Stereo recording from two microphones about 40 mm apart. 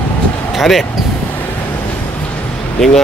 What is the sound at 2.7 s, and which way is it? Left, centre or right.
Speech, centre.